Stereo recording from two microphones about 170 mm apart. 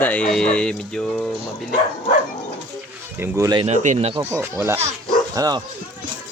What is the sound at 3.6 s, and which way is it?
Speech, 45° right (ahead or behind).